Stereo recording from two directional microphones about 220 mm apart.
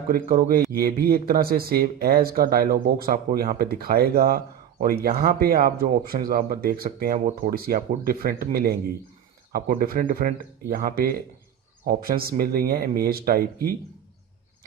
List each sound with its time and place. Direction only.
0.1 s speech: 40° right (ahead or behind)